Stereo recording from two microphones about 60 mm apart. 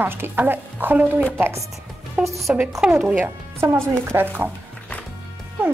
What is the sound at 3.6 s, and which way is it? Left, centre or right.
Speech, right.